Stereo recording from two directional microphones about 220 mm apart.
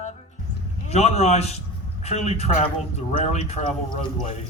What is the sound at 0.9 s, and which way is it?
A man's voice, 30° left (ahead or behind).